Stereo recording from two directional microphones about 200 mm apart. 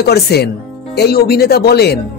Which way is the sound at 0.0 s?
55° left (ahead or behind).